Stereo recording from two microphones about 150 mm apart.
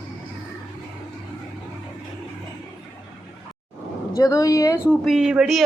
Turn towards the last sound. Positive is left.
turn(degrees=-5)  # may be behind; listen again after turning